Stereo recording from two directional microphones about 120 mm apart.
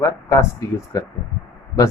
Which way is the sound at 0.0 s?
25° left (ahead or behind).